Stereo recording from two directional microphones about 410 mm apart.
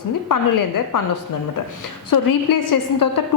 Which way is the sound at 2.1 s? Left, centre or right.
Left.